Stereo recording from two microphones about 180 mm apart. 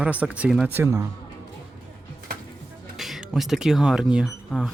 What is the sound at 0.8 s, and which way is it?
Speech, 20° right (ahead or behind).